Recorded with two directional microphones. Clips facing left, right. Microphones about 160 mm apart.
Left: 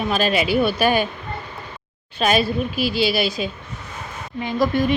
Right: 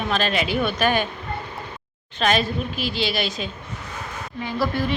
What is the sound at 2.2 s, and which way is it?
Speech, 10° left (ahead or behind).